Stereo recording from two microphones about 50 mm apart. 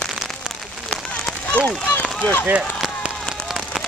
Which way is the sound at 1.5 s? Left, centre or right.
Left.